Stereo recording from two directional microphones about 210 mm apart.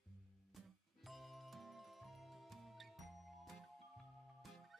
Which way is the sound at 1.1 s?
Centre (ahead or behind).